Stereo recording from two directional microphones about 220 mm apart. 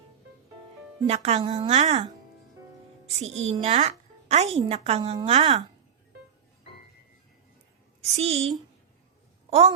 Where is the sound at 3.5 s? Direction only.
30° right (ahead or behind).